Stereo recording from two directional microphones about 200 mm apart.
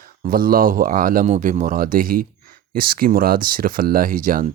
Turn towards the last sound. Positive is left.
turn(degrees=-45)  # may be behind; listen again after turning